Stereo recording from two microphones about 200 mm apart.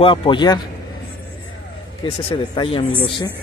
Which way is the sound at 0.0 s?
25° left (ahead or behind).